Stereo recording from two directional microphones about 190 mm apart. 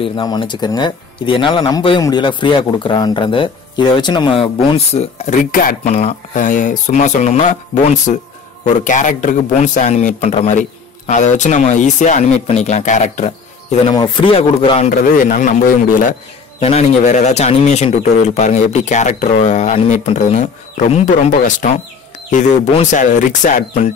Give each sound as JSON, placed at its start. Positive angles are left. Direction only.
{"t": 0.0, "sound": "a man's voice", "side_deg": 25}
{"t": 13.9, "sound": "speech", "side_deg": 25}
{"t": 14.9, "sound": "a man's voice", "side_deg": 45}